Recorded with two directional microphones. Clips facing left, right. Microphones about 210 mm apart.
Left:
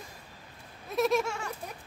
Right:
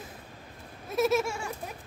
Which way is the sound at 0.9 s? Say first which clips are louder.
Right 1 dB; 5° right (ahead or behind).